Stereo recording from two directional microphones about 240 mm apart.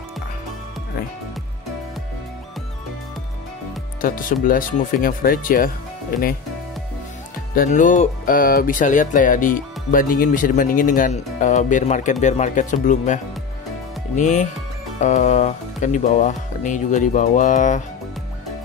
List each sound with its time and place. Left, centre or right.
4.0 s speech: left
7.5 s speech: left